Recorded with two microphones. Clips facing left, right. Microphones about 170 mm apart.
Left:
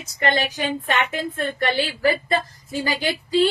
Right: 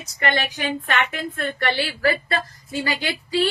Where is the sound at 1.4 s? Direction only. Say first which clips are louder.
Left 1 dB; 15° left (ahead or behind).